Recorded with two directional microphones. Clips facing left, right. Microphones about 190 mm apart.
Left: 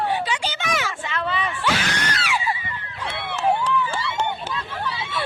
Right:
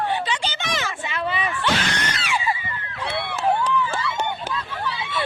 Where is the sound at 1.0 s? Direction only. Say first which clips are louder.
Even; 10° right (ahead or behind).